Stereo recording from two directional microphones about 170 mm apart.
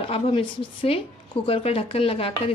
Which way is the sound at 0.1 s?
30° left (ahead or behind).